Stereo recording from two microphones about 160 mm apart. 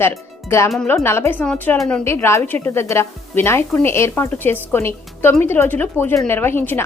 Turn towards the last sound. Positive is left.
turn(degrees=15)  # may be behind; listen again after turning